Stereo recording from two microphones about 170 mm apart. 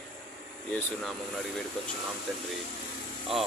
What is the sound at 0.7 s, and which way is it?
Speech, 5° left (ahead or behind).